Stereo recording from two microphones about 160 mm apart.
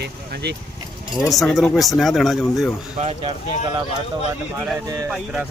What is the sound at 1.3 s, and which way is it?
Speech, centre (ahead or behind).